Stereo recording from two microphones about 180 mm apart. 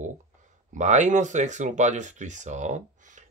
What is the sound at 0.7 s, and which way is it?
Speech, 40° right (ahead or behind).